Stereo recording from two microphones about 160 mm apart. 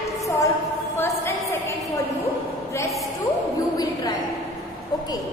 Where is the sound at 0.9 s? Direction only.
15° left (ahead or behind).